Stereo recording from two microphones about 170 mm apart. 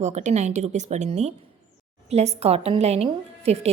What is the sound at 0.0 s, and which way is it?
A woman's voice, 45° right (ahead or behind).